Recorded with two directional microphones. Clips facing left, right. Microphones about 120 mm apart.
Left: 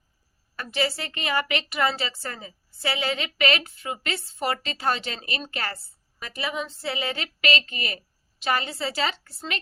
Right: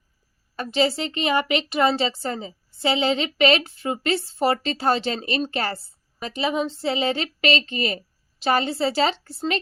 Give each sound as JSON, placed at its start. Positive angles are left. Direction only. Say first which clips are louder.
{"t": 0.5, "sound": "a woman's voice", "louder": "right 6 dB", "side_deg": -25}